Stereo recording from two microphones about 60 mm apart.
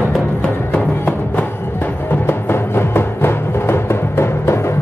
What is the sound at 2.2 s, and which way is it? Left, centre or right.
Music, left.